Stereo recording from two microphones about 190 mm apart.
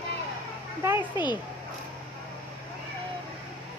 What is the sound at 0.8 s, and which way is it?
Speech, 15° right (ahead or behind).